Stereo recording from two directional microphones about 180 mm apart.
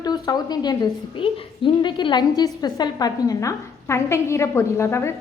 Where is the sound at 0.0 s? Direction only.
20° left (ahead or behind).